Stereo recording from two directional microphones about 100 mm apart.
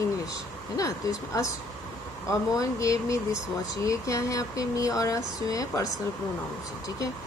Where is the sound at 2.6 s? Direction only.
30° left (ahead or behind).